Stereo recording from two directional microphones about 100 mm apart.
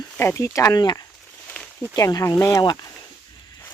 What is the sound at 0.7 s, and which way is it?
Speech, 45° left (ahead or behind).